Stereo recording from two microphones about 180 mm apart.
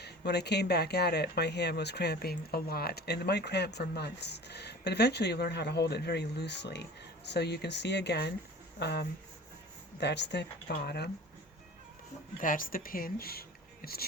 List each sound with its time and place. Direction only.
0.0 s speech: 65° left (ahead or behind)
12.4 s speech: 50° left (ahead or behind)